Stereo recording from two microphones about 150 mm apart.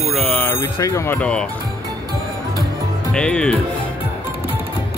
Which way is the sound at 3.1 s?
5° left (ahead or behind).